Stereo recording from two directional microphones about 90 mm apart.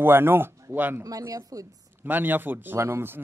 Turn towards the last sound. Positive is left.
turn(degrees=-30)  # may be behind; listen again after turning